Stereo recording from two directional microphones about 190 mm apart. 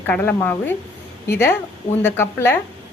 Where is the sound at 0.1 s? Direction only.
10° left (ahead or behind).